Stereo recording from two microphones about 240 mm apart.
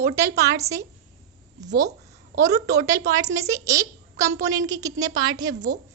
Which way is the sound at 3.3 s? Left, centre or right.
Centre.